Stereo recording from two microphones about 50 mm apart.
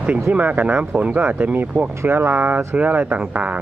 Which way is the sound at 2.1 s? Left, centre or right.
Right.